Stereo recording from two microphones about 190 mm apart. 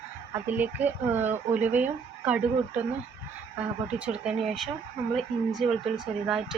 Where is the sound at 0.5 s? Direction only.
10° right (ahead or behind).